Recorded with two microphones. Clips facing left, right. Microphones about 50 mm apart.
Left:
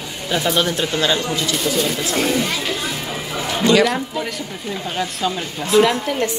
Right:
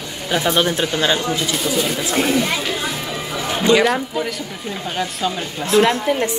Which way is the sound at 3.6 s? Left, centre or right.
Centre.